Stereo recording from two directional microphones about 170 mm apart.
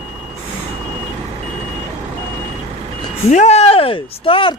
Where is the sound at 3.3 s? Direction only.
40° left (ahead or behind).